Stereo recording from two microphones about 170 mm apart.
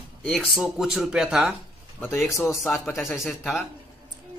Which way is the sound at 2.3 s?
15° left (ahead or behind).